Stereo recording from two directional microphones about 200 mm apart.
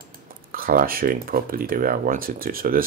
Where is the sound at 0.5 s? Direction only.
45° right (ahead or behind).